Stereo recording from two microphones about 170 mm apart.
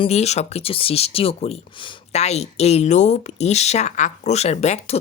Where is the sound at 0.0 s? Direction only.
40° left (ahead or behind).